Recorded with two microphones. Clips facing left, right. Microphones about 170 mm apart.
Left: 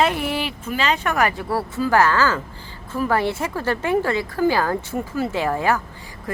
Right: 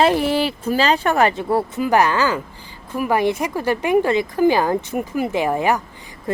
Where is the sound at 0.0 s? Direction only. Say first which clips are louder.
Right 5 dB; 30° right (ahead or behind); by 5.8 s 15° right (ahead or behind).